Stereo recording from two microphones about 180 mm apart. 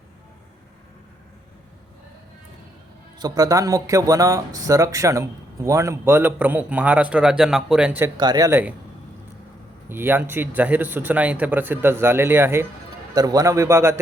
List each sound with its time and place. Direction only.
3.2 s speech: 20° right (ahead or behind)
8.2 s speech: 20° right (ahead or behind)
9.9 s speech: 10° right (ahead or behind)